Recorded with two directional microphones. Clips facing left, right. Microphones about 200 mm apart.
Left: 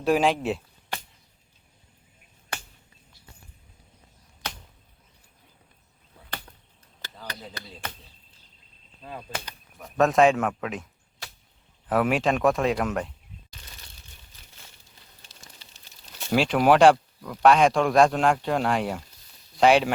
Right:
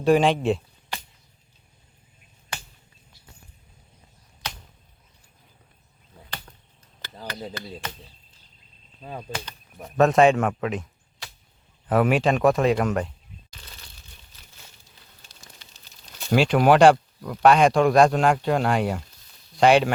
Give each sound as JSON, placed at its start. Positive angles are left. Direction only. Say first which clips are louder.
{"t": 0.0, "sound": "a man's voice", "louder": "right 3 dB", "side_deg": 0}
{"t": 2.5, "sound": "a sound", "louder": "even", "side_deg": 55}
{"t": 7.8, "sound": "arrow", "louder": "right 2 dB", "side_deg": 55}
{"t": 9.8, "sound": "a man's voice", "louder": "right 2 dB", "side_deg": 0}
{"t": 11.9, "sound": "a man's voice", "louder": "right 3 dB", "side_deg": 0}
{"t": 16.3, "sound": "a man's voice", "louder": "right 2 dB", "side_deg": 0}